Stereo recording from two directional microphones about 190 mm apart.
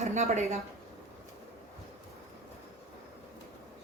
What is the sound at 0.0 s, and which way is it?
Speech, 35° right (ahead or behind).